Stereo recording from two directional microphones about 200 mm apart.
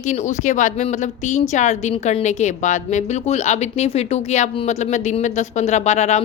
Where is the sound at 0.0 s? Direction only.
35° left (ahead or behind).